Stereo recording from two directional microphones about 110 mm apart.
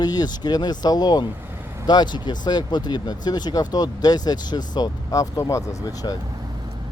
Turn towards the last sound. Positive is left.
turn(degrees=35)  # may be behind; listen again after turning